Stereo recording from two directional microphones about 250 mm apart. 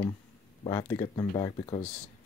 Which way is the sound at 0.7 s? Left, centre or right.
Centre.